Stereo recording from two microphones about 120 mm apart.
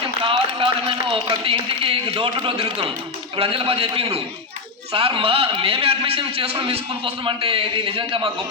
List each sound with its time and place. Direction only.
0.3 s a man's voice: 45° right (ahead or behind)